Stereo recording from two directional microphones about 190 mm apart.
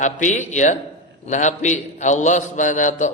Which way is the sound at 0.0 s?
40° left (ahead or behind).